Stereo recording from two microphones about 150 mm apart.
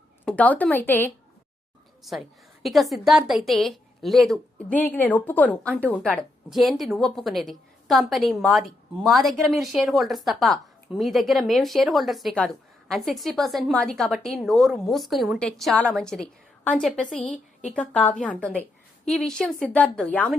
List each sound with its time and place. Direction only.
0.3 s a woman's voice: 10° left (ahead or behind)
2.1 s a woman's voice: centre (ahead or behind)
17.2 s a woman's voice: 55° left (ahead or behind)
17.7 s a woman's voice: 10° left (ahead or behind)